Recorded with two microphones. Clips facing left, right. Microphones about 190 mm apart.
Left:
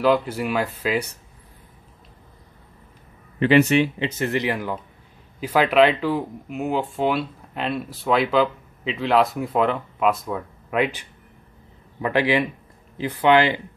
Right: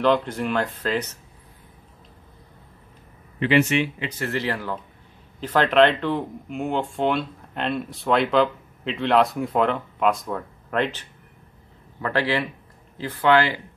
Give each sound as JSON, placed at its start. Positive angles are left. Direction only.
{"t": 0.0, "sound": "speech", "side_deg": 5}
{"t": 3.3, "sound": "speech", "side_deg": 40}
{"t": 4.1, "sound": "speech", "side_deg": 20}